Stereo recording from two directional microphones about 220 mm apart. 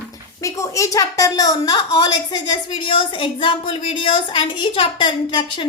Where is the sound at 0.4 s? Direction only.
15° left (ahead or behind).